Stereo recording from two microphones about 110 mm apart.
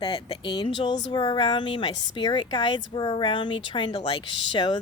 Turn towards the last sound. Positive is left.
turn(degrees=45)  # may be behind; listen again after turning